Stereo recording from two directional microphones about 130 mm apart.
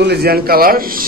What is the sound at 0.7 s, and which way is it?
Speech, 90° right.